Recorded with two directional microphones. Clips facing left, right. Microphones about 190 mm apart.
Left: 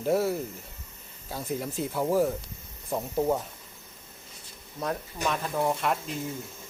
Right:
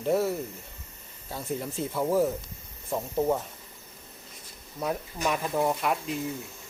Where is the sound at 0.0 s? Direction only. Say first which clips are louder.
Even; centre (ahead or behind).